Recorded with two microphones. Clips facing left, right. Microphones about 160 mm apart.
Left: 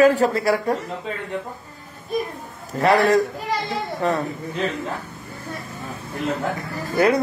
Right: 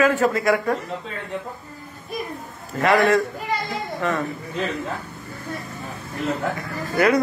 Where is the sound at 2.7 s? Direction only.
35° left (ahead or behind).